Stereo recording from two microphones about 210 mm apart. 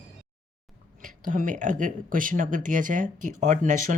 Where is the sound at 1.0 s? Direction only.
40° right (ahead or behind).